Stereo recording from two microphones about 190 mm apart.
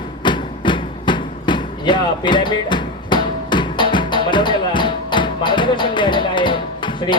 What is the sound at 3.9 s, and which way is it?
Music, 25° left (ahead or behind).